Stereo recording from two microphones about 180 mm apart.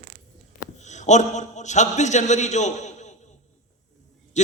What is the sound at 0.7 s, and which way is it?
A man's voice, 40° left (ahead or behind).